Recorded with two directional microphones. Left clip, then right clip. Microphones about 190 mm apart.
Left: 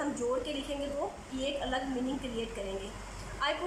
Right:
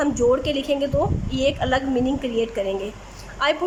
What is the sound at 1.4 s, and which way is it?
Speech, 55° right (ahead or behind).